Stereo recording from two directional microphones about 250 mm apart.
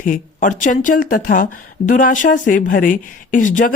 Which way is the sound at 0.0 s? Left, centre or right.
Left.